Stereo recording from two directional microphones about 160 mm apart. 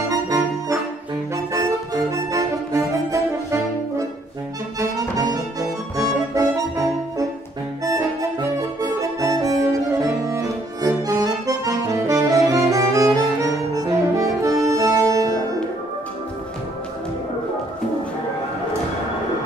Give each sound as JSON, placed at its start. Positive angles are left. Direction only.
{"t": 0.1, "sound": "organ", "side_deg": -20}
{"t": 2.0, "sound": "music", "side_deg": -20}
{"t": 4.7, "sound": "accordion", "side_deg": -25}
{"t": 7.8, "sound": "music", "side_deg": -20}
{"t": 10.3, "sound": "accordion", "side_deg": -20}